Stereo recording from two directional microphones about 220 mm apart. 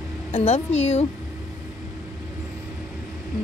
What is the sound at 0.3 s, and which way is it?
Speech, 30° left (ahead or behind).